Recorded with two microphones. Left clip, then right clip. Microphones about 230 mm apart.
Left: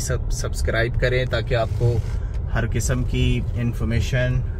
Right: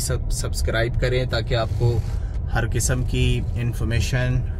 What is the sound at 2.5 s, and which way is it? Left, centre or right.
Speech, right.